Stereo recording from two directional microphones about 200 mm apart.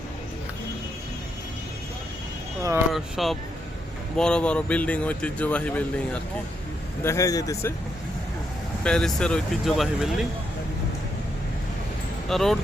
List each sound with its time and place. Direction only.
2.9 s speech: centre (ahead or behind); by 7.7 s 15° left (ahead or behind)
8.8 s speech: 5° left (ahead or behind)
12.3 s speech: centre (ahead or behind)